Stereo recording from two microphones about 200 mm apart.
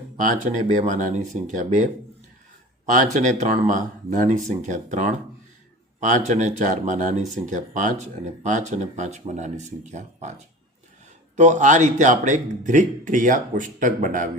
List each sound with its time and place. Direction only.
0.2 s speech: 40° right (ahead or behind)